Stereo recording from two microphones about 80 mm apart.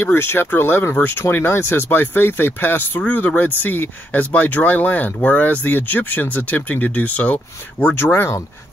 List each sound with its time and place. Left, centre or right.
0.0 s speech: left
7.9 s speech: left